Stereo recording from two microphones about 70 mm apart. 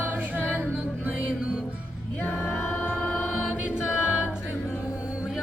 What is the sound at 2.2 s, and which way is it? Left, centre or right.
Music, left.